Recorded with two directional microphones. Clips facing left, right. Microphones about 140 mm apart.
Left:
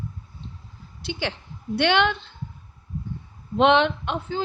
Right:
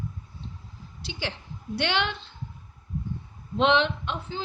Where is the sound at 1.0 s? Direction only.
55° left (ahead or behind).